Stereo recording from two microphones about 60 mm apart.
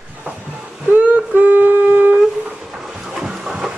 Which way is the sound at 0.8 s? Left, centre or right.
Right.